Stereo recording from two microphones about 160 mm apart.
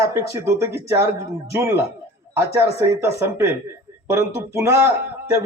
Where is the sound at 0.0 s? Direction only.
15° right (ahead or behind).